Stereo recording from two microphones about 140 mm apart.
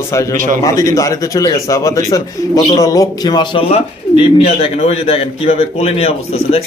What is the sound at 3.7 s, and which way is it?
Speech, 45° left (ahead or behind).